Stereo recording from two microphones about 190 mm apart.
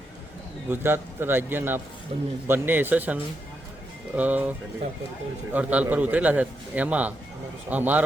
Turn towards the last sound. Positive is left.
turn(degrees=-10)  # may be behind; listen again after turning